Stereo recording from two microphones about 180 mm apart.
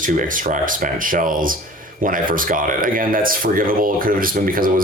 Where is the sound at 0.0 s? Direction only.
45° right (ahead or behind).